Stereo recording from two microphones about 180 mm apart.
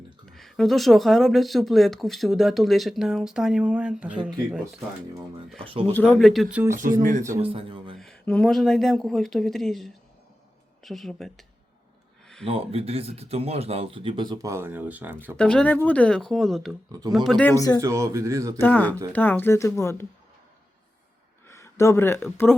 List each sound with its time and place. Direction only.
0.3 s speech: centre (ahead or behind)
4.2 s speech: 25° right (ahead or behind)
5.5 s speech: 30° right (ahead or behind)
5.9 s speech: 10° left (ahead or behind)
7.0 s speech: 45° right (ahead or behind)
7.4 s a man's voice: 30° right (ahead or behind)
7.9 s speech: 5° left (ahead or behind)
12.5 s speech: 30° right (ahead or behind); by 15.4 s 10° right (ahead or behind)
15.4 s speech: 5° left (ahead or behind)
17.7 s speech: 15° right (ahead or behind)
18.6 s speech: 10° left (ahead or behind)
21.4 s speech: 15° left (ahead or behind)